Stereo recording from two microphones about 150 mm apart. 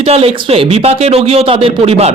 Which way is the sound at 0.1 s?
40° right (ahead or behind).